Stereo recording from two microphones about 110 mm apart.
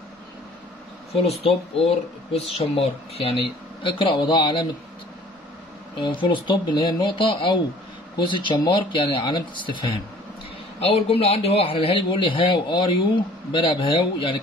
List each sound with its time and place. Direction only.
1.1 s speech: 65° left (ahead or behind); by 4.6 s 40° left (ahead or behind)
5.9 s a man's voice: 45° left (ahead or behind)
10.8 s a man's voice: 65° left (ahead or behind)